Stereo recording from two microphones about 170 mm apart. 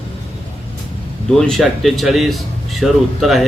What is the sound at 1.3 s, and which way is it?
Speech, centre (ahead or behind).